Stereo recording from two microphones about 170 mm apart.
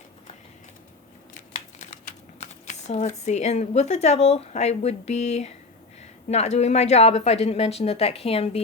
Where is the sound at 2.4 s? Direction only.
45° left (ahead or behind).